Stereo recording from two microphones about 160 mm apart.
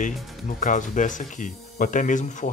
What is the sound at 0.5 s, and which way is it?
Speech, 55° left (ahead or behind).